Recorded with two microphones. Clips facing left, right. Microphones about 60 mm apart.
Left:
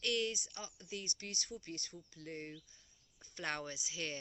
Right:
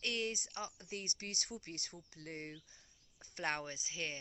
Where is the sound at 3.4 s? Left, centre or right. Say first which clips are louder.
Right 2 dB; right.